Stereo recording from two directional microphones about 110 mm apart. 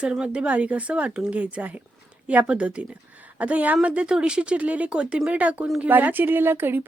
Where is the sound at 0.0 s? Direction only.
10° right (ahead or behind).